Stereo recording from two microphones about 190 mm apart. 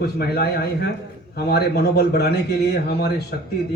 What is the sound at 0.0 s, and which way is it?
A man's voice, 55° left (ahead or behind).